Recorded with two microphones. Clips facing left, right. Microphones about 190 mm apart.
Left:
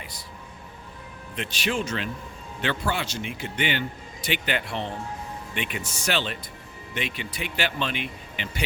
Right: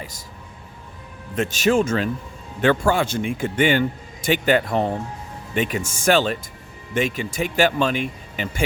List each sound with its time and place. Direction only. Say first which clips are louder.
1.4 s speech: right 10 dB; 45° right (ahead or behind)